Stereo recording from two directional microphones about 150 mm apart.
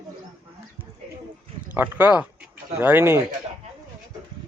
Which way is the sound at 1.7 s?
10° right (ahead or behind).